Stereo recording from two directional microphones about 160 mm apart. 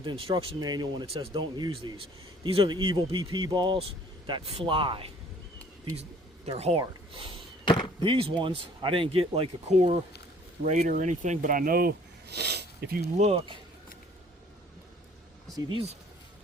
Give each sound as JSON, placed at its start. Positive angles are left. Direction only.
{"t": 0.0, "sound": "speech", "side_deg": -30}
{"t": 5.8, "sound": "a sound", "side_deg": -40}
{"t": 6.7, "sound": "speech", "side_deg": -35}
{"t": 13.1, "sound": "speech", "side_deg": -45}